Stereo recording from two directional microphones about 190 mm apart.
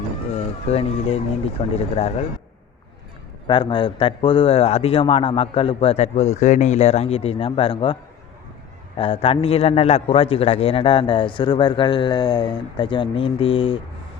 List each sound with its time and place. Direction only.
0.7 s speech: 30° left (ahead or behind)
3.4 s a man's voice: 25° left (ahead or behind)
9.0 s a man's voice: 30° left (ahead or behind)